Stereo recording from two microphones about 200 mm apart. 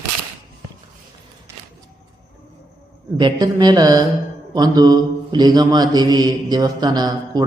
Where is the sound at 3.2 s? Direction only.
20° right (ahead or behind).